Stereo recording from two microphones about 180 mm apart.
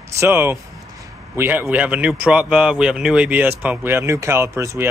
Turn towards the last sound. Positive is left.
turn(degrees=-15)  # may be behind; listen again after turning